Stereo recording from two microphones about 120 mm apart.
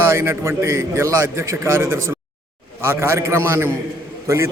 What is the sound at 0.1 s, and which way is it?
A man's voice, 20° right (ahead or behind).